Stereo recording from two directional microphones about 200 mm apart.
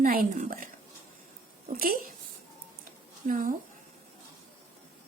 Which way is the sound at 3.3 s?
40° right (ahead or behind).